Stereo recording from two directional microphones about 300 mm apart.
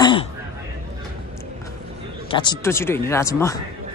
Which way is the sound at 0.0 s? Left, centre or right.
Centre.